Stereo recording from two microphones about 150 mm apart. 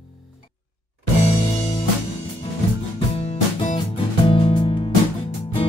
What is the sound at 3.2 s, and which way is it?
Music, 45° left (ahead or behind).